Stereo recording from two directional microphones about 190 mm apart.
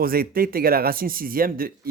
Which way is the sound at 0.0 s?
50° right (ahead or behind).